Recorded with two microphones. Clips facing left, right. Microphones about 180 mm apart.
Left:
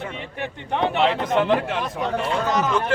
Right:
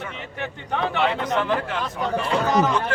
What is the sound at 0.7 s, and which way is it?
Speech, 20° left (ahead or behind).